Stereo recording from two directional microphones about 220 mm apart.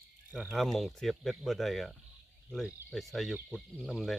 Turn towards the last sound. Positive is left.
turn(degrees=0)  # may be behind; listen again after turning